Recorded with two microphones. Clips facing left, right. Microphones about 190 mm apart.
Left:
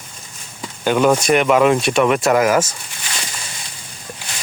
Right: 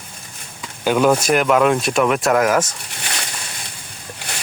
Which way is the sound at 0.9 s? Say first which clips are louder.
Left 1 dB; 5° right (ahead or behind).